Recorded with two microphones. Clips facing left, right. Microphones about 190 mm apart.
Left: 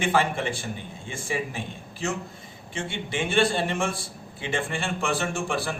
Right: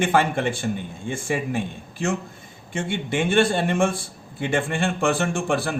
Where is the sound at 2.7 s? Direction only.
50° right (ahead or behind).